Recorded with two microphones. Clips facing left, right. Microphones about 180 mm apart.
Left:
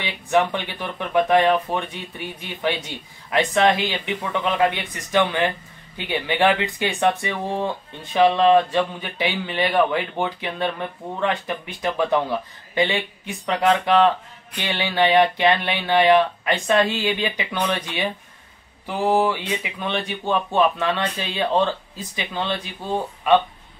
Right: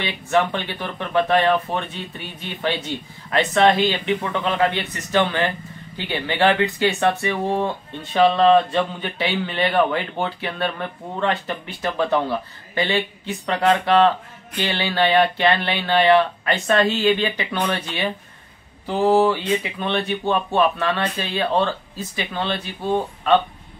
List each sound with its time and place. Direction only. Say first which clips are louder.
0.0 s speech: even; 15° left (ahead or behind)